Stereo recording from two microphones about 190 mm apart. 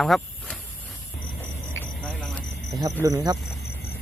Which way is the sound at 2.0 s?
Centre (ahead or behind).